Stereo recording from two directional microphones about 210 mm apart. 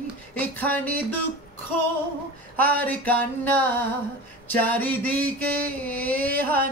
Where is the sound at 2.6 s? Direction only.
10° left (ahead or behind).